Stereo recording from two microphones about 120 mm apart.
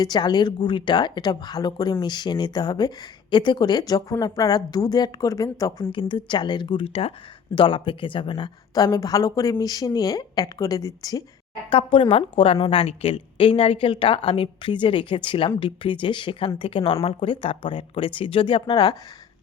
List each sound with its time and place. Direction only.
0.0 s speech: 35° left (ahead or behind)
5.9 s a woman's voice: 45° left (ahead or behind)
8.7 s speech: 30° left (ahead or behind)
11.7 s a woman's voice: 45° left (ahead or behind)